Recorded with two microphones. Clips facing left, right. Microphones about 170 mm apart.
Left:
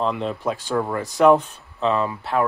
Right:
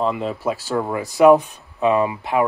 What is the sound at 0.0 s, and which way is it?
Speech, 5° right (ahead or behind).